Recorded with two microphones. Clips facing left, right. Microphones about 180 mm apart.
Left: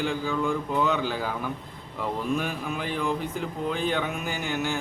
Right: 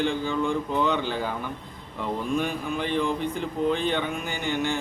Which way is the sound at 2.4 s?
5° left (ahead or behind).